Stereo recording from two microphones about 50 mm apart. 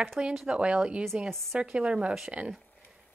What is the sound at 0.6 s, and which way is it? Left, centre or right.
A woman's voice, centre.